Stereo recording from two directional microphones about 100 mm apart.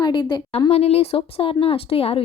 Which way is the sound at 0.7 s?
90° left.